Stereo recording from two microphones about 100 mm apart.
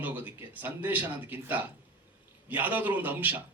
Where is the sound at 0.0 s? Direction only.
15° right (ahead or behind).